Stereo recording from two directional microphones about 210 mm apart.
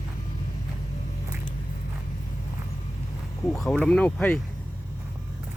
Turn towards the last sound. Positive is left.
turn(degrees=5)  # may be behind; listen again after turning